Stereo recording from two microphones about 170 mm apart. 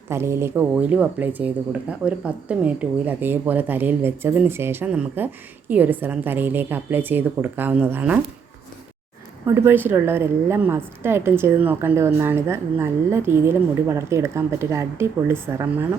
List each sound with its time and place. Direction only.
0.1 s speech: 15° right (ahead or behind)
9.6 s speech: 10° right (ahead or behind)